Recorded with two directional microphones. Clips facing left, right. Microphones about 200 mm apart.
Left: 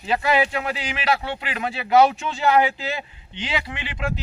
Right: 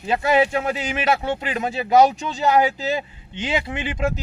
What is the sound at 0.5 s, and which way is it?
Speech, 45° right (ahead or behind).